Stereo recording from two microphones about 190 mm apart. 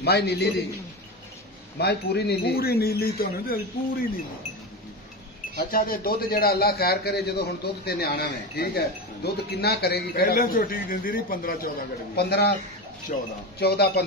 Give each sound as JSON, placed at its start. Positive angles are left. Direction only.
{"t": 0.0, "sound": "a man's voice", "side_deg": 60}
{"t": 1.8, "sound": "a man's voice", "side_deg": 60}
{"t": 5.7, "sound": "a man's voice", "side_deg": 50}
{"t": 13.1, "sound": "speech", "side_deg": 40}
{"t": 13.6, "sound": "a man's voice", "side_deg": 60}